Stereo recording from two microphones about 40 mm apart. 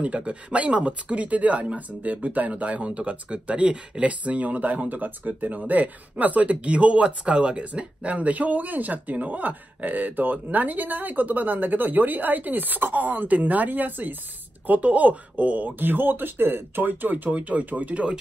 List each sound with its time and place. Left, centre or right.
0.0 s speech: right